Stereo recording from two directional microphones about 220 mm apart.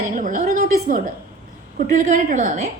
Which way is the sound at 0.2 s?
35° right (ahead or behind).